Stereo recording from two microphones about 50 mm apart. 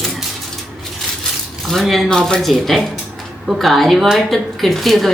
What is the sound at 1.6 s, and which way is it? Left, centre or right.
Speech, centre.